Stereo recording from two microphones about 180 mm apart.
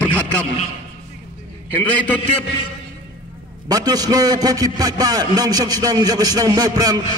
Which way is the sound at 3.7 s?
20° right (ahead or behind).